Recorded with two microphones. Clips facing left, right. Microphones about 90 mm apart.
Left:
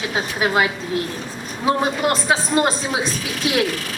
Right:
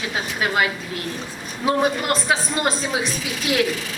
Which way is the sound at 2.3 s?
20° left (ahead or behind).